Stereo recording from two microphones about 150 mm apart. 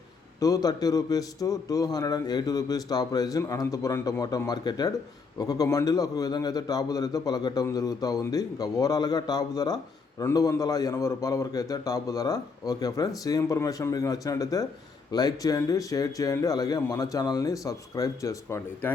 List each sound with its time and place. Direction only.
0.3 s a man's voice: 25° left (ahead or behind)